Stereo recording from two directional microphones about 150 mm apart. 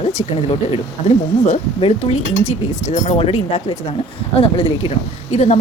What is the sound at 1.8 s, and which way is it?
Speech, 40° left (ahead or behind).